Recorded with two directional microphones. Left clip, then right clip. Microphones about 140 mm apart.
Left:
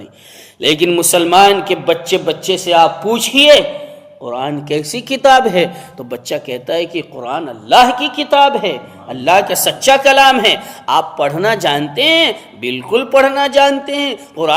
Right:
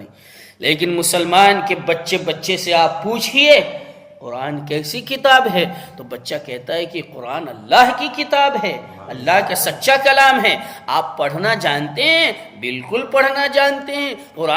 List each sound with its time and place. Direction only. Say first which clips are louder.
0.6 s speech: left 5 dB; 45° left (ahead or behind)